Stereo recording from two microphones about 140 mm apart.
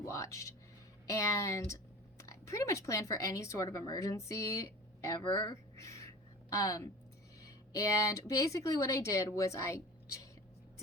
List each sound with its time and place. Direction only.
0.0 s a woman's voice: 20° left (ahead or behind)